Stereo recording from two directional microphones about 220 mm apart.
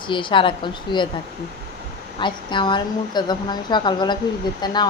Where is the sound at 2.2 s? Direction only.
20° left (ahead or behind).